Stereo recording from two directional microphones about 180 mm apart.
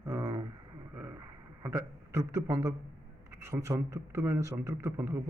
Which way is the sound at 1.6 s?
15° right (ahead or behind).